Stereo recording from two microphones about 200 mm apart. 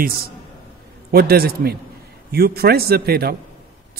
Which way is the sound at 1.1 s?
50° right (ahead or behind).